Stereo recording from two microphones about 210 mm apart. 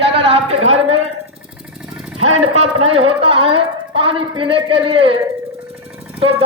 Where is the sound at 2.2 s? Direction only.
70° right (ahead or behind).